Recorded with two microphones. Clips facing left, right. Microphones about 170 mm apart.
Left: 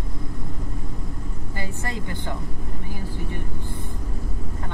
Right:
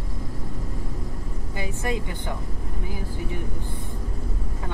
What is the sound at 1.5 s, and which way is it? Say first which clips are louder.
Speech: right 4 dB; 15° right (ahead or behind).